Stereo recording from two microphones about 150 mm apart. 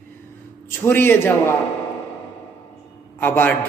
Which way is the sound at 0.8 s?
15° left (ahead or behind).